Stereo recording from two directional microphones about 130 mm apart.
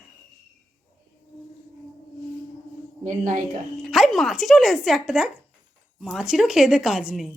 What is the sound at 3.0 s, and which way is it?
Speech, 90° right.